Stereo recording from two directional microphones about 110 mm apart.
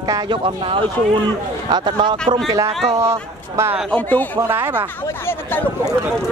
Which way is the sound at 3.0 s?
25° right (ahead or behind).